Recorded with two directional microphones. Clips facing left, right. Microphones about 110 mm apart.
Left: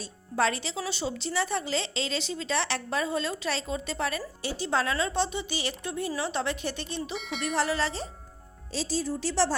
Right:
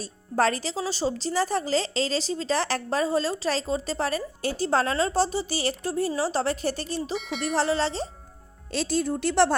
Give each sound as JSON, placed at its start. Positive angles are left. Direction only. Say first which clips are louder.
{"t": 0.0, "sound": "speech", "louder": "right 3 dB", "side_deg": -40}
{"t": 7.2, "sound": "speech", "louder": "right 3 dB", "side_deg": 0}
{"t": 7.4, "sound": "speech", "louder": "right 3 dB", "side_deg": -35}
{"t": 8.7, "sound": "a woman's voice", "louder": "right 4 dB", "side_deg": -65}